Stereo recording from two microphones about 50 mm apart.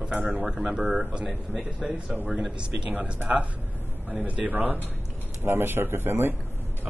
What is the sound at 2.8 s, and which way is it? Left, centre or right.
Speech, centre.